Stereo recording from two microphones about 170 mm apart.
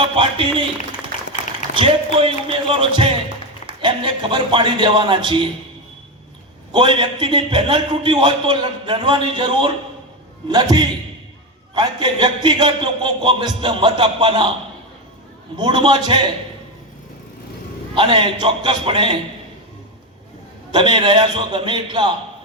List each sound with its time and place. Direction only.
0.0 s speech: 30° right (ahead or behind)
1.7 s a man's voice: 30° right (ahead or behind)
6.7 s a man's voice: 30° right (ahead or behind)
15.5 s a man's voice: 25° right (ahead or behind)
17.9 s a man's voice: 30° right (ahead or behind)
20.7 s a man's voice: 30° right (ahead or behind)